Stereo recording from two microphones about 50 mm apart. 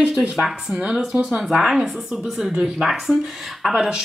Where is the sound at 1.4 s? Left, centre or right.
Centre.